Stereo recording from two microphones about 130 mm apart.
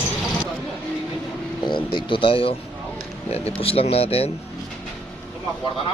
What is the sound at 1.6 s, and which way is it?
Speech, 40° left (ahead or behind).